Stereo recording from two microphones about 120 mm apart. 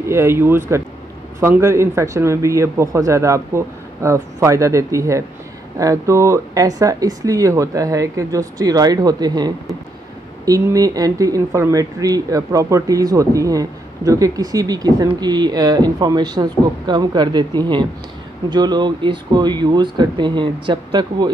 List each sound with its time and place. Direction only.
0.1 s a man's voice: 20° right (ahead or behind); by 21.3 s 40° right (ahead or behind)